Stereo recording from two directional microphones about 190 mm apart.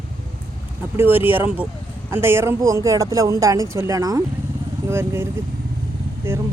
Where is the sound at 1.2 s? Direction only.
10° right (ahead or behind).